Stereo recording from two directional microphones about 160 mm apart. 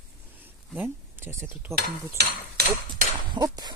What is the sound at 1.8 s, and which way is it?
Cutlery, 80° right.